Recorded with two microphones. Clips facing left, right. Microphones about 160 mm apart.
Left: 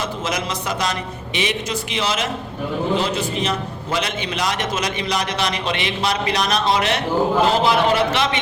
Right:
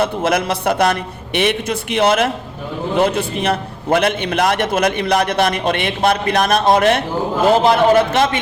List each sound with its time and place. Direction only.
0.0 s a man's voice: 55° right (ahead or behind)